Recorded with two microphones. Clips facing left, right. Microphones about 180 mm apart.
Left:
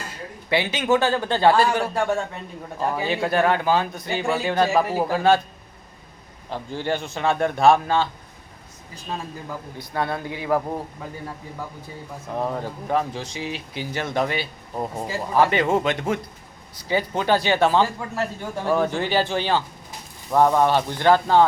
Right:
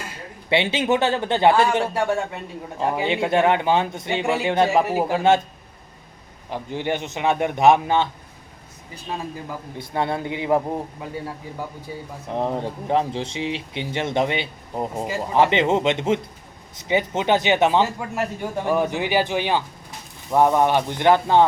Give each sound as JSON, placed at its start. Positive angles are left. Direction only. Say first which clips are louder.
{"t": 0.5, "sound": "a man's voice", "louder": "right 1 dB", "side_deg": -25}
{"t": 6.5, "sound": "a man's voice", "louder": "right 1 dB", "side_deg": -20}
{"t": 9.7, "sound": "a man's voice", "louder": "right 2 dB", "side_deg": -25}
{"t": 12.3, "sound": "a man's voice", "louder": "right 2 dB", "side_deg": -25}